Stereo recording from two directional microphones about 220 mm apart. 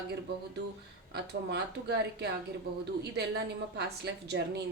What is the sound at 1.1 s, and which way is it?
A woman's voice, 50° right (ahead or behind).